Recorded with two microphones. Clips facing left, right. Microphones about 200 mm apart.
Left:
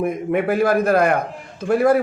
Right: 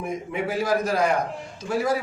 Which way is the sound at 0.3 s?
55° left (ahead or behind).